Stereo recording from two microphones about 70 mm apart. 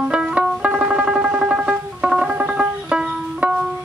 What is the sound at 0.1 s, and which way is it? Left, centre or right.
Music, centre.